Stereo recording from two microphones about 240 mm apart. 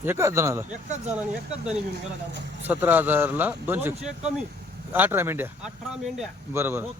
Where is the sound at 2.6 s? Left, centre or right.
Centre.